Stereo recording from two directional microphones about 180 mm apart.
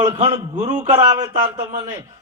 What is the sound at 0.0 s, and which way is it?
Speech, 15° right (ahead or behind).